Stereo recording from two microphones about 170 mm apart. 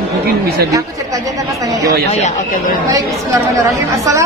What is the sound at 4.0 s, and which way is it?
Speech, 20° right (ahead or behind).